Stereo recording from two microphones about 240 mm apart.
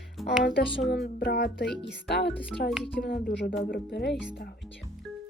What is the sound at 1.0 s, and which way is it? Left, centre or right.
Music, left.